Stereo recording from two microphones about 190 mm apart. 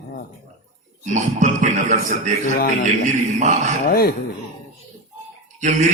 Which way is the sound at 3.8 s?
50° left (ahead or behind).